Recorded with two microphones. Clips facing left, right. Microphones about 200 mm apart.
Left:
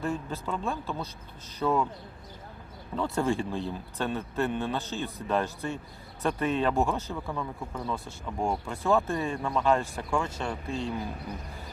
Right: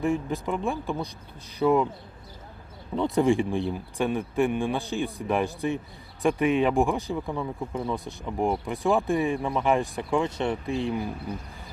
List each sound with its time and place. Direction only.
0.0 s speech: 15° right (ahead or behind)
2.9 s speech: 20° right (ahead or behind)